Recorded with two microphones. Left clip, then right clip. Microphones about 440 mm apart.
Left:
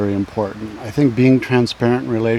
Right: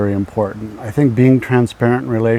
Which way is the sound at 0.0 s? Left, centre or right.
Centre.